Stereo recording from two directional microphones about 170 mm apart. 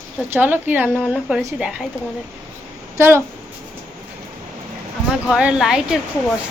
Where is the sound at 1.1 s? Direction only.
5° right (ahead or behind).